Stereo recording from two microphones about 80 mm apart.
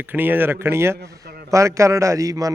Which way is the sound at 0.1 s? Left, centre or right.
Right.